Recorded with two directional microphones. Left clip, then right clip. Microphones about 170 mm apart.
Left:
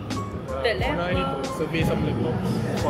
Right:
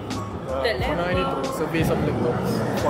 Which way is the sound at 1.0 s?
10° right (ahead or behind).